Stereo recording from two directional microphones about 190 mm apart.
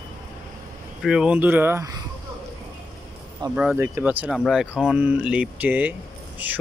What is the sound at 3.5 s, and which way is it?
Speech, 5° right (ahead or behind).